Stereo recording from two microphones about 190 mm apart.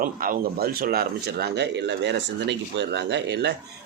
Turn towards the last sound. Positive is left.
turn(degrees=-65)  # may be behind; listen again after turning